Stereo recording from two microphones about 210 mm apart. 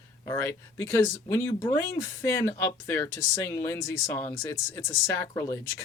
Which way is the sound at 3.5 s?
10° left (ahead or behind).